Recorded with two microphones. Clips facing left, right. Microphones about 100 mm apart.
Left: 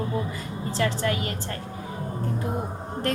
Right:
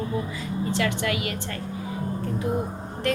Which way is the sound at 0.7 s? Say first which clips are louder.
Left 2 dB; 35° left (ahead or behind).